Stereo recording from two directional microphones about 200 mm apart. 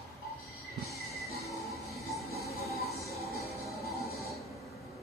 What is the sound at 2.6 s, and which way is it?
Music, 30° right (ahead or behind).